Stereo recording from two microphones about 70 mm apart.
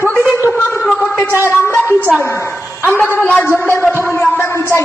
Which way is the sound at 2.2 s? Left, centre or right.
Left.